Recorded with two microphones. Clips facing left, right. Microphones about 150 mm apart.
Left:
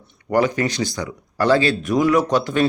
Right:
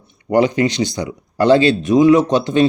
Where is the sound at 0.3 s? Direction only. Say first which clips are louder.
Right 4 dB; 20° right (ahead or behind).